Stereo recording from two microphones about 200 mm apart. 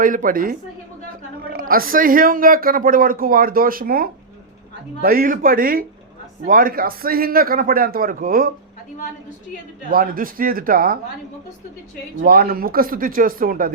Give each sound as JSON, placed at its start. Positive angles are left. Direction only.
{"t": 0.0, "sound": "a woman's voice", "side_deg": -45}
{"t": 9.9, "sound": "a woman's voice", "side_deg": -45}
{"t": 12.2, "sound": "a woman's voice", "side_deg": -45}